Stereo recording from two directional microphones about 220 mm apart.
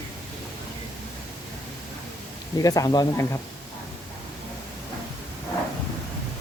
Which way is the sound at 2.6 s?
15° left (ahead or behind).